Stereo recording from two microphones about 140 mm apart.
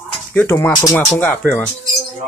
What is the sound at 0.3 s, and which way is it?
Speech, 10° left (ahead or behind).